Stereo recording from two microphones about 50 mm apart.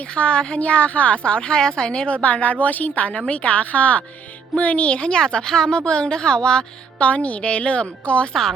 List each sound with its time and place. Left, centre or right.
0.0 s a woman's voice: left
2.2 s a woman's voice: left